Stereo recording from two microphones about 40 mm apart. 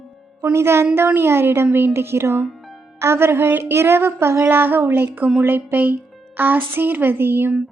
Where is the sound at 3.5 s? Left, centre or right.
Right.